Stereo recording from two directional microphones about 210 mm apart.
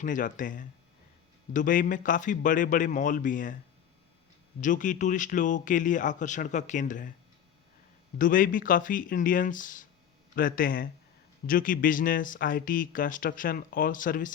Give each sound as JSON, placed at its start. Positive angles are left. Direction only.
{"t": 0.0, "sound": "speech", "side_deg": 40}
{"t": 4.6, "sound": "speech", "side_deg": 40}
{"t": 8.2, "sound": "speech", "side_deg": 40}